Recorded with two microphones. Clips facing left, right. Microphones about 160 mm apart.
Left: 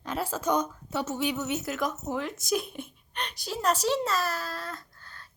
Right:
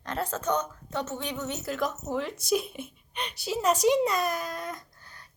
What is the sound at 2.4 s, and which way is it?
Speech, centre (ahead or behind).